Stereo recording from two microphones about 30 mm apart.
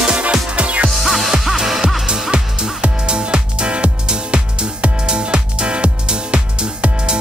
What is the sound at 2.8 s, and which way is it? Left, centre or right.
Music, right.